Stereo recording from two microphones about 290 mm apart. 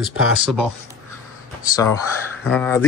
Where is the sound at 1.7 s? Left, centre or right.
Centre.